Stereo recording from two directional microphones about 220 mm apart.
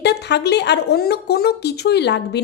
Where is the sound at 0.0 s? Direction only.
50° left (ahead or behind).